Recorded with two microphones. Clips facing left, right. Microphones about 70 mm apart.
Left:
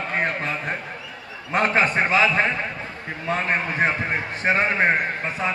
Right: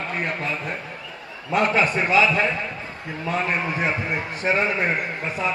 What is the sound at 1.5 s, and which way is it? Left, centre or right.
A man's voice, left.